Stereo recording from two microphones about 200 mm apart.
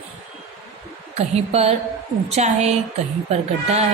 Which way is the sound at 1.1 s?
30° right (ahead or behind).